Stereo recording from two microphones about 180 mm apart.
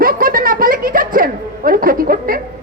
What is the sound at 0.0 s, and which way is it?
Snicker, 50° right (ahead or behind).